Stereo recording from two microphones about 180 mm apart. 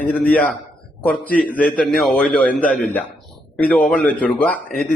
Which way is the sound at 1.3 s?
50° left (ahead or behind).